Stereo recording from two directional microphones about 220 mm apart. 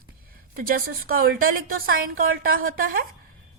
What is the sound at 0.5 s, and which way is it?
A woman's voice, 40° right (ahead or behind).